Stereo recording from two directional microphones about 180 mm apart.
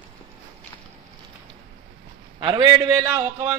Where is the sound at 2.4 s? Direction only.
20° right (ahead or behind).